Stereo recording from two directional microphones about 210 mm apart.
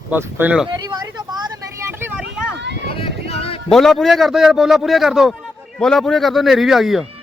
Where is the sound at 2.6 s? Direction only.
55° right (ahead or behind).